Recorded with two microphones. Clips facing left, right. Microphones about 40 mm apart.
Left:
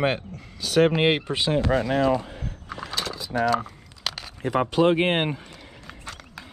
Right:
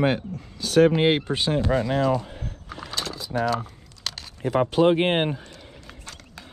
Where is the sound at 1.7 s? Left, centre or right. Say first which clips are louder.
Left 1 dB; left.